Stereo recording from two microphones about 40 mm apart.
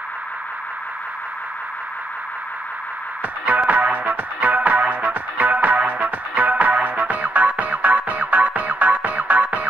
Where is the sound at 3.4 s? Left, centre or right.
Right.